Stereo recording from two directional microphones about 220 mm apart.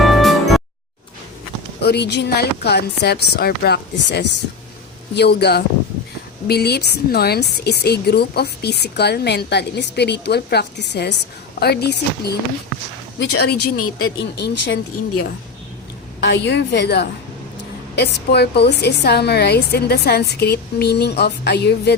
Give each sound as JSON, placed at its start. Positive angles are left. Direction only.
{"t": 0.0, "sound": "music", "side_deg": 0}
{"t": 1.8, "sound": "speech", "side_deg": 50}
{"t": 16.2, "sound": "speech", "side_deg": 50}